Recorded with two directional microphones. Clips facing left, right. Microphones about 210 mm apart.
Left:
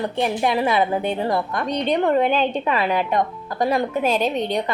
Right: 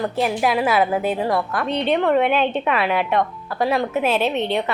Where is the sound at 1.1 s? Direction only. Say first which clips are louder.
Right 1 dB; 25° left (ahead or behind).